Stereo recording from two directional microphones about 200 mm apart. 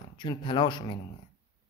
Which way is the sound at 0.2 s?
20° left (ahead or behind).